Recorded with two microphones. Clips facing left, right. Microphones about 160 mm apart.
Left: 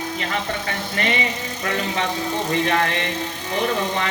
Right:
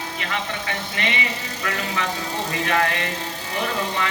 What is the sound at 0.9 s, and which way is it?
A man's voice, 35° left (ahead or behind).